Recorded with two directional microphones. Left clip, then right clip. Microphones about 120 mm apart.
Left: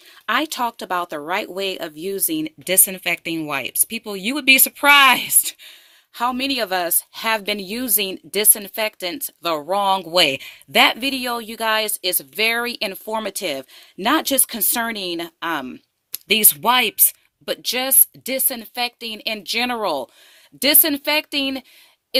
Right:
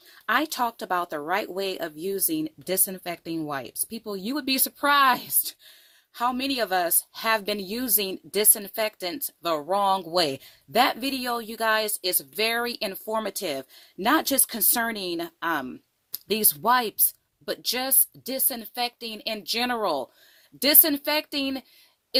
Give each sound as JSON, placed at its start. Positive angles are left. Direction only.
{"t": 0.3, "sound": "speech", "side_deg": 15}
{"t": 5.4, "sound": "a woman's voice", "side_deg": 30}